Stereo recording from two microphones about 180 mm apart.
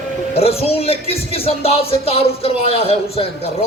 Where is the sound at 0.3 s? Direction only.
35° left (ahead or behind).